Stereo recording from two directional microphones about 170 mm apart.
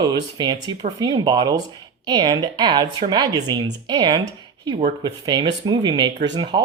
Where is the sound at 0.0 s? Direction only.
25° right (ahead or behind).